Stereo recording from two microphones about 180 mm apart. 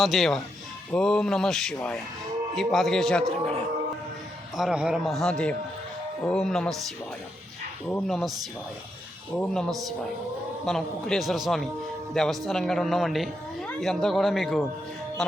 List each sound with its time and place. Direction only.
0.0 s a man's voice: centre (ahead or behind)
4.5 s a man's voice: 5° right (ahead or behind)
7.9 s a man's voice: 5° left (ahead or behind)
9.4 s a man's voice: 5° left (ahead or behind)